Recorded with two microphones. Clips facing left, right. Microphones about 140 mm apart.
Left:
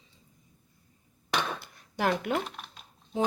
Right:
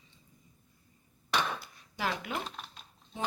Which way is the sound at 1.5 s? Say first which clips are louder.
Left 6 dB; 60° left (ahead or behind).